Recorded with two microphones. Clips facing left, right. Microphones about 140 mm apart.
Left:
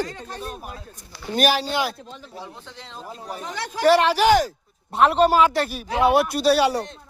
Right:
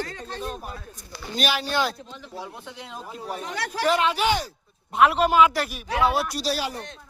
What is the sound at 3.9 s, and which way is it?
Speech, 70° left (ahead or behind).